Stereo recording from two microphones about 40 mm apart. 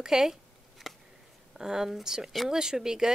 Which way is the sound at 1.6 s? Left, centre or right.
Centre.